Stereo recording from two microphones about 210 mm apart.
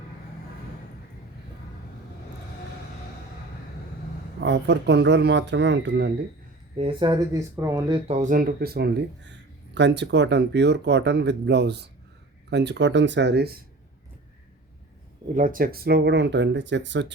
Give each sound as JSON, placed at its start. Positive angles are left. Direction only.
{"t": 4.4, "sound": "speech", "side_deg": -55}
{"t": 6.7, "sound": "speech", "side_deg": -25}
{"t": 8.0, "sound": "speech", "side_deg": -35}
{"t": 15.4, "sound": "speech", "side_deg": -40}